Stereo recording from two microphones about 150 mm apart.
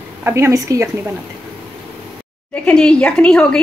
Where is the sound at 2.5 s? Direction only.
10° left (ahead or behind).